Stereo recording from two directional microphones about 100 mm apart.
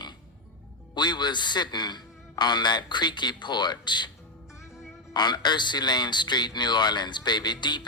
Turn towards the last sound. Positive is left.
turn(degrees=45)  # may be behind; listen again after turning